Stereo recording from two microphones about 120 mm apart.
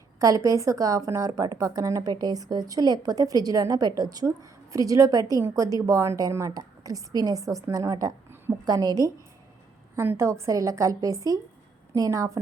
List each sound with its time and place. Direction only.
0.2 s a woman's voice: 30° right (ahead or behind)